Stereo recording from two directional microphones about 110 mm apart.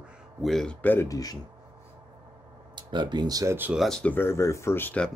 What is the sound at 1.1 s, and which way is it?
Speech, 35° left (ahead or behind).